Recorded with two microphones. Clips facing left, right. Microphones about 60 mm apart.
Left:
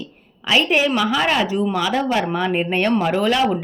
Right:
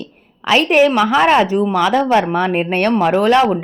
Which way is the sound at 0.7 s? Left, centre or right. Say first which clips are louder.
Right 6 dB; right.